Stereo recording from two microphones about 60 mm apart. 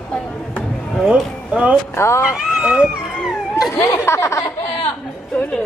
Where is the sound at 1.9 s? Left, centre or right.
Left.